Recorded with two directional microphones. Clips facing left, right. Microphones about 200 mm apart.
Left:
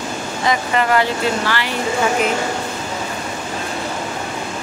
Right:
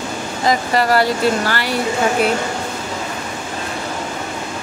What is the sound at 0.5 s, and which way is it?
Speech, 35° right (ahead or behind).